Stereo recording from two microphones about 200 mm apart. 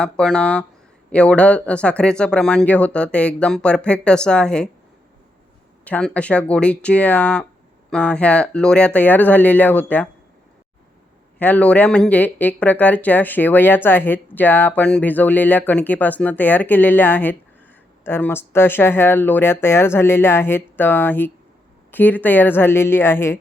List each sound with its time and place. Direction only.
0.0 s speech: 5° left (ahead or behind)
5.8 s speech: 5° left (ahead or behind)
11.3 s speech: 10° left (ahead or behind)